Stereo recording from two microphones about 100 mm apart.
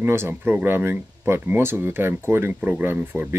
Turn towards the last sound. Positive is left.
turn(degrees=-20)  # may be behind; listen again after turning